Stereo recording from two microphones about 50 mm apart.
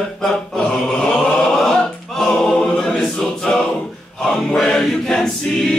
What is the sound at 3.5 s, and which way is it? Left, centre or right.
Music, centre.